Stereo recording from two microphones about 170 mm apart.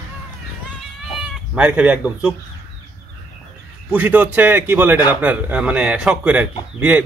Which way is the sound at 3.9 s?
10° right (ahead or behind).